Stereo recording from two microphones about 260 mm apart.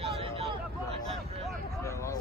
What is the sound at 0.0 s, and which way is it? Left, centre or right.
Vehicle, right.